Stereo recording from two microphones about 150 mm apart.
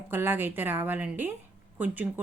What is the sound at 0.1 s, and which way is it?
A woman's voice, 15° right (ahead or behind).